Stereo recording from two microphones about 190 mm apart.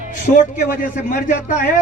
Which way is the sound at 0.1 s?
45° left (ahead or behind).